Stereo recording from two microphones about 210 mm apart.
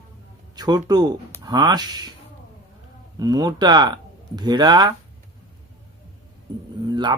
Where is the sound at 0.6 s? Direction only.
20° right (ahead or behind).